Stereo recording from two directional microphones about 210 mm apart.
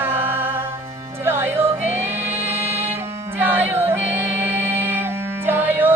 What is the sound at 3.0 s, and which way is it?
Music, 10° right (ahead or behind).